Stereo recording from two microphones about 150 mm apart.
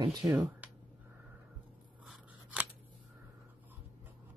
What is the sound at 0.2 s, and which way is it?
Speech, 20° right (ahead or behind).